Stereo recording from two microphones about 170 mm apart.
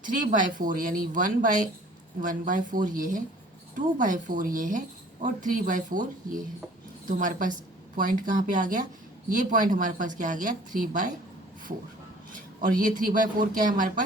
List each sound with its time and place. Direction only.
0.3 s speech: 50° right (ahead or behind)
7.2 s speech: 50° right (ahead or behind)
12.3 s speech: 50° right (ahead or behind)